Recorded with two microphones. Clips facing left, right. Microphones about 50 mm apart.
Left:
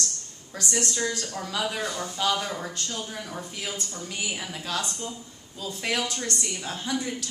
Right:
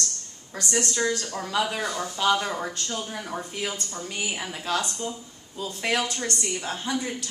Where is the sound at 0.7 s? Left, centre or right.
Right.